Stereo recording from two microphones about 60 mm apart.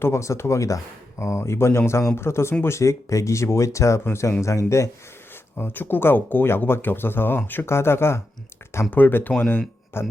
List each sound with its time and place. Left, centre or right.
0.0 s speech: left
5.5 s speech: left
8.9 s speech: left